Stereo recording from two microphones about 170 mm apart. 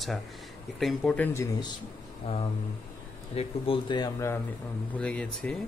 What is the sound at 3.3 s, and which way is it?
Speech, 35° left (ahead or behind).